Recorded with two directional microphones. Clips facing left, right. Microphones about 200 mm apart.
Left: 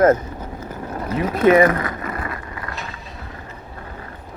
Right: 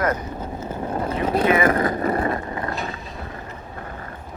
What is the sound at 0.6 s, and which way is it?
Boat, 25° right (ahead or behind).